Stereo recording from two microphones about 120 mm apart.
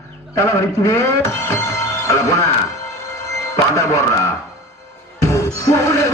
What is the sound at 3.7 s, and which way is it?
Speech, 25° left (ahead or behind).